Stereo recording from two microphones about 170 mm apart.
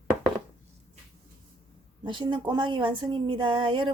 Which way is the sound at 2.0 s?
30° right (ahead or behind).